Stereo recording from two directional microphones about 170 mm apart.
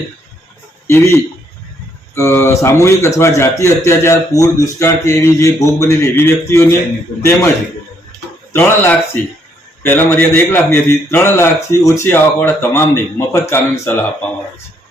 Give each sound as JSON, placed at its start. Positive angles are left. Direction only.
{"t": 0.9, "sound": "a man's voice", "side_deg": 15}
{"t": 8.5, "sound": "a man's voice", "side_deg": 15}